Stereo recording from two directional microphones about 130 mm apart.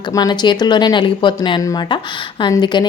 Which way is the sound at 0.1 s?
30° left (ahead or behind).